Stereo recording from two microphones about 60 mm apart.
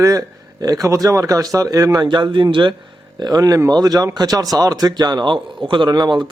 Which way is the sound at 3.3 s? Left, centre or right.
Right.